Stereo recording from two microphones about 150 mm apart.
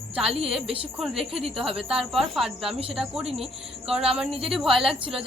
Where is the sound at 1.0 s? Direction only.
Centre (ahead or behind).